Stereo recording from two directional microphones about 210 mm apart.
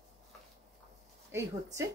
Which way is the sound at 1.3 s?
15° right (ahead or behind).